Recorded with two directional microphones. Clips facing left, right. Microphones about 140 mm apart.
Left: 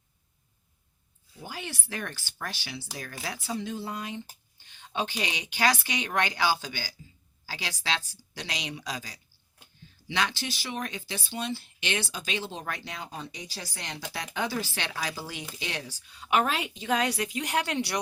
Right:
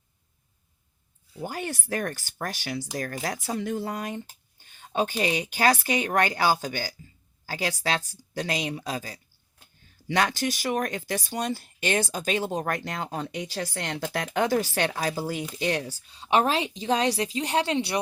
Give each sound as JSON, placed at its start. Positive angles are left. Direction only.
{"t": 1.4, "sound": "speech", "side_deg": -55}
{"t": 1.9, "sound": "speech", "side_deg": -40}
{"t": 4.6, "sound": "speech", "side_deg": -45}
{"t": 10.1, "sound": "speech", "side_deg": -50}
{"t": 16.0, "sound": "a woman's voice", "side_deg": -30}